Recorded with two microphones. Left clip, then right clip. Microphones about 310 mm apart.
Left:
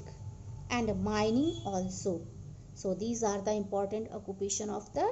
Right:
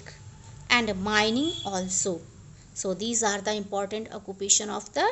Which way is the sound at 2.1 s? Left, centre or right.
Right.